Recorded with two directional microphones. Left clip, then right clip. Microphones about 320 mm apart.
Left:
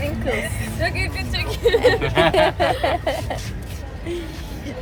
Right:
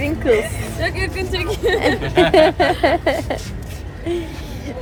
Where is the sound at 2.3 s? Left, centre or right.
Right.